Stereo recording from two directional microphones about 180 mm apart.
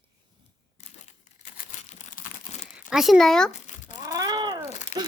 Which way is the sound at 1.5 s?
45° left (ahead or behind).